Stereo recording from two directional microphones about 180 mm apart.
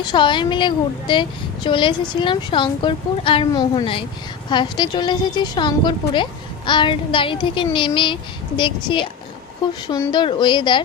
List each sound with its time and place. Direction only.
0.0 s a woman's voice: 25° left (ahead or behind)